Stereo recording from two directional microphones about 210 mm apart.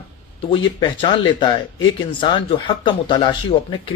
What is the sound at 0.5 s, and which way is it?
Speech, 25° left (ahead or behind).